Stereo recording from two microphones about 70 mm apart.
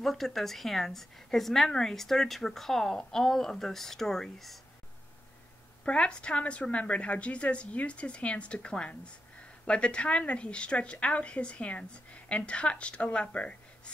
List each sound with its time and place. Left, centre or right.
0.0 s a woman's voice: centre
5.9 s a woman's voice: centre